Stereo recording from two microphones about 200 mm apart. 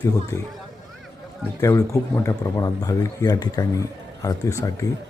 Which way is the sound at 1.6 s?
15° left (ahead or behind).